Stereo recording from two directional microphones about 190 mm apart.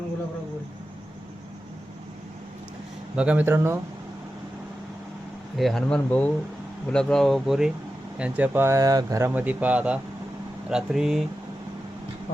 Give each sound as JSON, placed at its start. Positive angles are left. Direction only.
{"t": 3.2, "sound": "speech", "side_deg": -10}
{"t": 5.5, "sound": "speech", "side_deg": 0}